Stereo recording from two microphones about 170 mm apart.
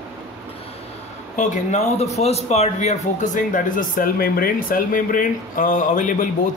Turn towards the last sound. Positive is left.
turn(degrees=50)  # may be behind; listen again after turning